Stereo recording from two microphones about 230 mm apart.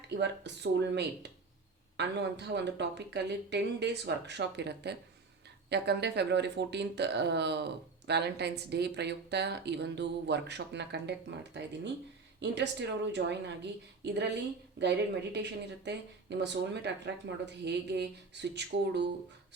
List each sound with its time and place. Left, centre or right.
0.1 s speech: right
12.4 s speech: right